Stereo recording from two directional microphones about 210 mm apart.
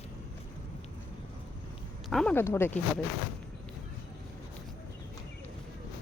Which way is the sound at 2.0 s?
5° left (ahead or behind).